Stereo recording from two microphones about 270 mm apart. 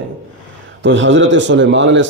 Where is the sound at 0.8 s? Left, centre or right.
Right.